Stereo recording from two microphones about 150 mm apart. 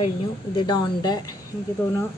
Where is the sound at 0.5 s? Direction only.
30° left (ahead or behind).